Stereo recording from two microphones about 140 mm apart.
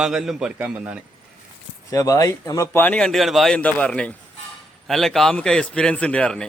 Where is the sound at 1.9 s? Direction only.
25° left (ahead or behind).